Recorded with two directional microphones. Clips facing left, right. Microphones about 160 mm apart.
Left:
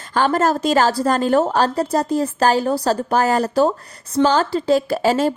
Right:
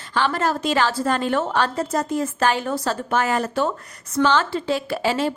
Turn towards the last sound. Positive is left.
turn(degrees=40)  # may be behind; listen again after turning